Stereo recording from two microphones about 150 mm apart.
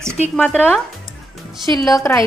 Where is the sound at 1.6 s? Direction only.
25° left (ahead or behind).